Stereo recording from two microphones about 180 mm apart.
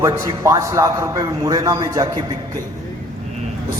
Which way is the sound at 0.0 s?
20° right (ahead or behind).